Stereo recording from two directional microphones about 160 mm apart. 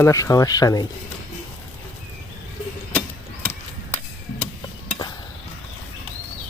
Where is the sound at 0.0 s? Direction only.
20° left (ahead or behind).